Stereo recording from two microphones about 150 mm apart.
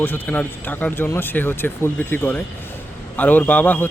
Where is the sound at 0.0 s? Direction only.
10° left (ahead or behind).